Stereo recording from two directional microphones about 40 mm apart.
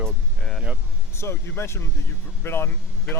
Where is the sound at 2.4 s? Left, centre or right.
Left.